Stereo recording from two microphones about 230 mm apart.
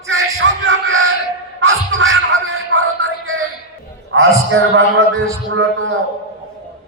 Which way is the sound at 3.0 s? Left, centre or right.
Right.